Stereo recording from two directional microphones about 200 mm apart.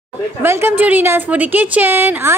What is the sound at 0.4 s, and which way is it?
A woman's voice, 10° right (ahead or behind).